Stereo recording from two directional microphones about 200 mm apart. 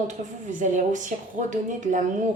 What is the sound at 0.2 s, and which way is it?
A woman's voice, 40° right (ahead or behind).